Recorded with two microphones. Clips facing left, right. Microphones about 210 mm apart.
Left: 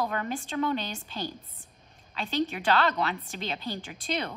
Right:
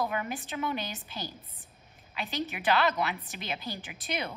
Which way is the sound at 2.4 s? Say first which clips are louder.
Right 3 dB; 15° right (ahead or behind).